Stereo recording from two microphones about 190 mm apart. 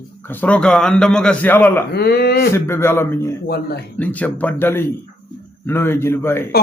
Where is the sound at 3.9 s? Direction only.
10° left (ahead or behind).